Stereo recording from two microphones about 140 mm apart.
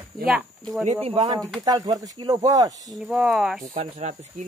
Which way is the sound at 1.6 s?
30° right (ahead or behind).